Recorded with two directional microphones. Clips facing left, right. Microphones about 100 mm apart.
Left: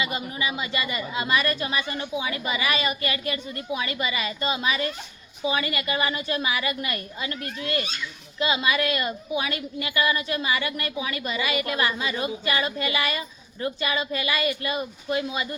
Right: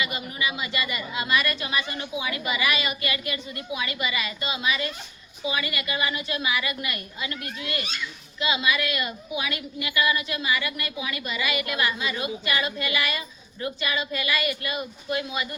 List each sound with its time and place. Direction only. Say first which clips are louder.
0.0 s a woman's voice: left 1 dB; 30° left (ahead or behind)